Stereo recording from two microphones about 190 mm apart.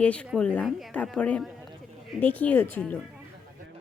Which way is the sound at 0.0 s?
5° left (ahead or behind).